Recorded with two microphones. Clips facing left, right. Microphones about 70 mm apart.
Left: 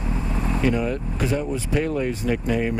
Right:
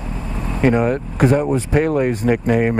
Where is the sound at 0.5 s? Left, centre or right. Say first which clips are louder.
Right 8 dB; right.